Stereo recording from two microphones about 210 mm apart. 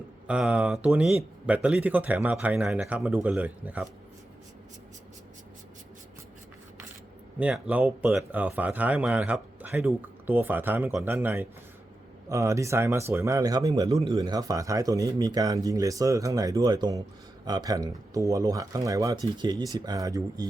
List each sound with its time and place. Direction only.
0.3 s speech: 5° right (ahead or behind)
7.3 s speech: 5° right (ahead or behind)